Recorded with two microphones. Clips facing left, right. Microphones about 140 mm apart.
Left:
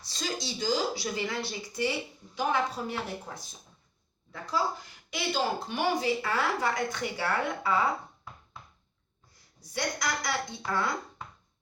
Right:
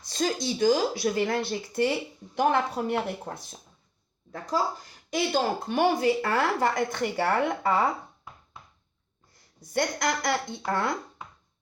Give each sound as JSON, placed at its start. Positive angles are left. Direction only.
{"t": 0.0, "sound": "speech", "side_deg": -50}
{"t": 4.3, "sound": "speech", "side_deg": -45}
{"t": 9.6, "sound": "speech", "side_deg": -50}